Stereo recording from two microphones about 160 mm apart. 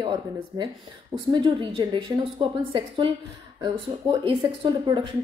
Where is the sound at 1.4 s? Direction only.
30° right (ahead or behind).